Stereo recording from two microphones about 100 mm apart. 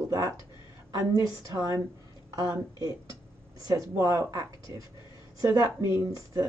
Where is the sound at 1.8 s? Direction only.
30° right (ahead or behind).